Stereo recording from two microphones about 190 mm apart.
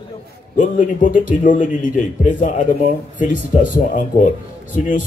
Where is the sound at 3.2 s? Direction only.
45° left (ahead or behind).